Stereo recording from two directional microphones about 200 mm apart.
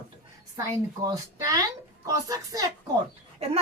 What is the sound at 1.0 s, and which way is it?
Speech, 15° right (ahead or behind).